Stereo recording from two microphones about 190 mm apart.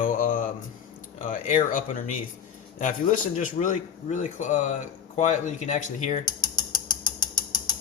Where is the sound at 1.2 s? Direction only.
40° left (ahead or behind).